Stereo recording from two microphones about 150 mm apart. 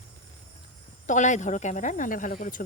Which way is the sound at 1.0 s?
55° left (ahead or behind).